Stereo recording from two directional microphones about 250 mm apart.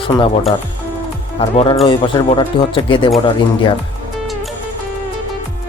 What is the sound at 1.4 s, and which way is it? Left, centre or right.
Speech, left.